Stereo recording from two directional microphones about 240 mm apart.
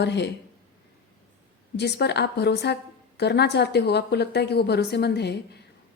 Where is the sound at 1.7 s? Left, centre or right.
Left.